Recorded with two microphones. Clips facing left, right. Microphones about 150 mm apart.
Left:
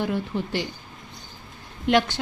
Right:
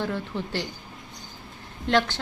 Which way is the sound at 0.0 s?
15° left (ahead or behind).